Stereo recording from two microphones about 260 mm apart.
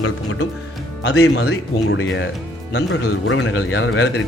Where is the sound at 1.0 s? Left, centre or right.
Left.